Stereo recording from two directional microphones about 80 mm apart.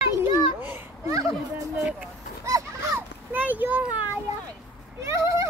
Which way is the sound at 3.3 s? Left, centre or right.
Right.